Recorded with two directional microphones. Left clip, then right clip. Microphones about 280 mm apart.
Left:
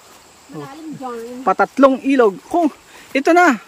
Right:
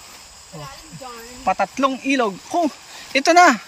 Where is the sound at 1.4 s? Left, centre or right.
Centre.